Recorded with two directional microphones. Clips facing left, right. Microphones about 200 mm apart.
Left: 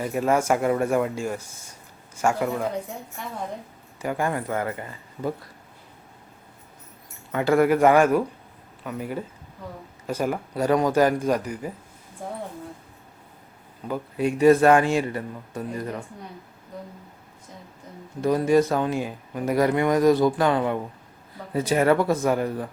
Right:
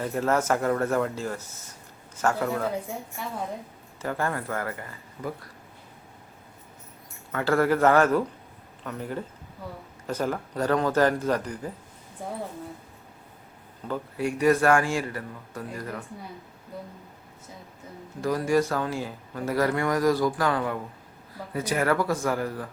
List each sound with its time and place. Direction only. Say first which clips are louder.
0.0 s speech: left 2 dB; 10° left (ahead or behind)
3.2 s a woman's voice: even; 5° right (ahead or behind)
4.0 s speech: left 3 dB; 15° left (ahead or behind)
7.3 s speech: left 4 dB; 15° left (ahead or behind)
13.8 s speech: left 3 dB; 15° left (ahead or behind)
18.2 s speech: left 4 dB; 20° left (ahead or behind)